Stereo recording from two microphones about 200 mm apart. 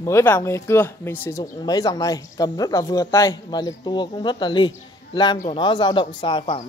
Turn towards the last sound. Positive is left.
turn(degrees=25)  # may be behind; listen again after turning